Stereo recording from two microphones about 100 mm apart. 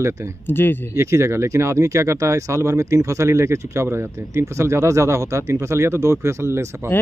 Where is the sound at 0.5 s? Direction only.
20° left (ahead or behind).